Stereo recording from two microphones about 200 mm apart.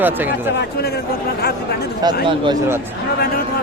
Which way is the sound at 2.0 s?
25° right (ahead or behind).